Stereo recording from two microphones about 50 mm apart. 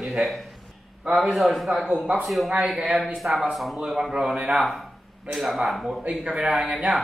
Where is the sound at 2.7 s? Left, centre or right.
Centre.